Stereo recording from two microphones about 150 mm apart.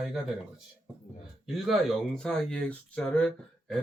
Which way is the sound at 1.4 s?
Centre (ahead or behind).